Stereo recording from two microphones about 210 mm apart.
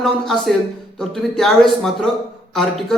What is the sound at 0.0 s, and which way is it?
A man's voice, centre (ahead or behind).